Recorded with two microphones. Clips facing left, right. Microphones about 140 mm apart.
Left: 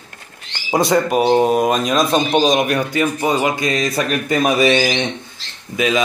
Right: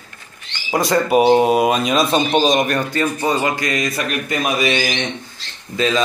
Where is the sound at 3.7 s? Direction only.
35° left (ahead or behind).